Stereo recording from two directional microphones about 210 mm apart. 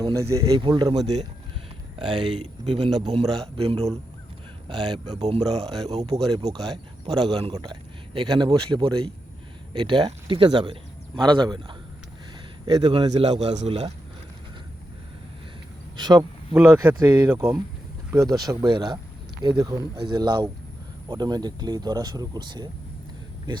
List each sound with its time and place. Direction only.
0.0 s speech: 15° right (ahead or behind)
12.6 s speech: 20° right (ahead or behind)
16.0 s speech: 20° right (ahead or behind)